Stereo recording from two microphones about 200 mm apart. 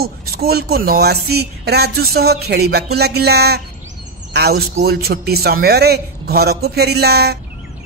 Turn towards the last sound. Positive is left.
turn(degrees=-55)  # may be behind; listen again after turning